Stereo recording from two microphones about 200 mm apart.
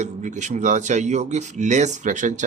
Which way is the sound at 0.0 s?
40° right (ahead or behind).